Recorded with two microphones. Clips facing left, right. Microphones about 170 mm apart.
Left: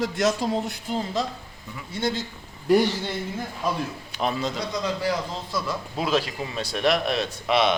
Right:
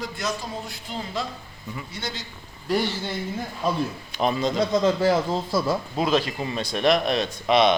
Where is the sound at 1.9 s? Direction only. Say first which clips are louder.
Left 11 dB; 55° left (ahead or behind).